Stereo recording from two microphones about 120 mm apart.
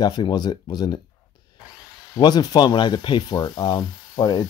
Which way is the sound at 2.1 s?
35° left (ahead or behind).